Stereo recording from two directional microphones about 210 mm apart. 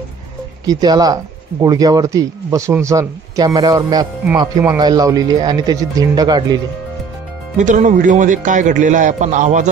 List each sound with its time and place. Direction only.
0.7 s speech: 20° right (ahead or behind)
7.5 s speech: 35° right (ahead or behind)